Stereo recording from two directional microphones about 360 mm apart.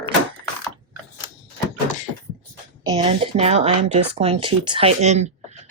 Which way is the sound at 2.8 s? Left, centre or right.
Centre.